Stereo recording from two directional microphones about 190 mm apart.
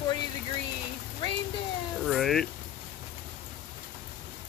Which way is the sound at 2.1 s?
Centre (ahead or behind).